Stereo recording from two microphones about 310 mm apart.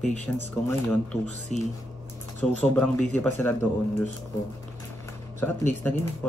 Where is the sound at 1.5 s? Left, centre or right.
Left.